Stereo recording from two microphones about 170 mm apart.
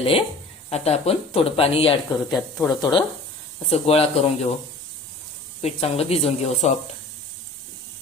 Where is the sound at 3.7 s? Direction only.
35° left (ahead or behind).